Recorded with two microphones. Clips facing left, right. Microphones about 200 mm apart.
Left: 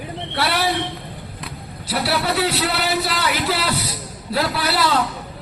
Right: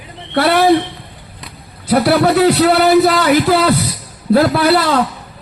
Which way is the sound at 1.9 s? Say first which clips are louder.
Right 10 dB; 50° right (ahead or behind).